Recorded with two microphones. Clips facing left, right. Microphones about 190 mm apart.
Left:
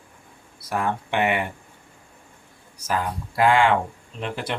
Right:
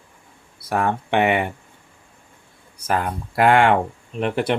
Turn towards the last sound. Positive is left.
turn(degrees=-60)  # may be behind; listen again after turning